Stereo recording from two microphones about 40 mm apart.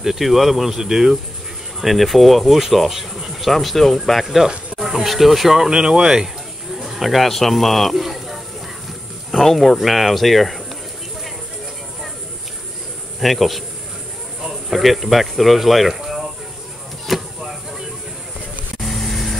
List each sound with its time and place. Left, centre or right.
0.0 s speech: centre
5.7 s speech: centre
13.2 s speech: centre
16.0 s a sound: centre
18.8 s vehicle: centre